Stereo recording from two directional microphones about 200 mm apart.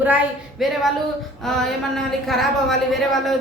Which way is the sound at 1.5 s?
Centre (ahead or behind).